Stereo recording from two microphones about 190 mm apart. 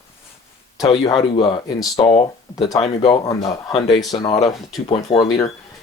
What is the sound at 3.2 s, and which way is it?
Speech, 20° left (ahead or behind).